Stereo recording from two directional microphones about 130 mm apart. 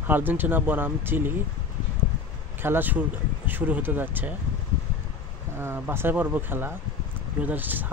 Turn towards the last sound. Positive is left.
turn(degrees=-15)  # may be behind; listen again after turning